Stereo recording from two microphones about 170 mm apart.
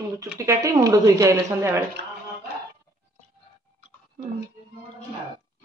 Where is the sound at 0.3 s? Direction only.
20° right (ahead or behind).